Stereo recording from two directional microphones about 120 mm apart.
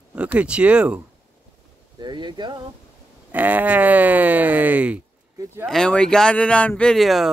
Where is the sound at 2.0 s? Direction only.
40° right (ahead or behind).